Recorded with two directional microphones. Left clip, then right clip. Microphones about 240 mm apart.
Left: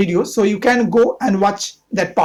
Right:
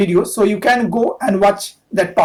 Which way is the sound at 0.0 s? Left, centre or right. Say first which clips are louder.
Right 2 dB; left.